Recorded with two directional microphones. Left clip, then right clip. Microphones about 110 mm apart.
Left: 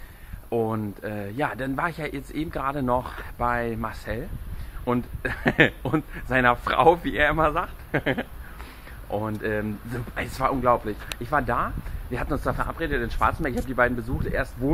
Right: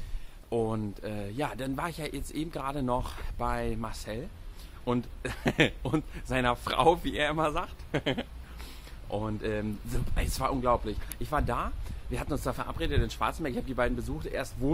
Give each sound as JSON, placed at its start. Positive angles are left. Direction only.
{"t": 0.5, "sound": "speech", "side_deg": -30}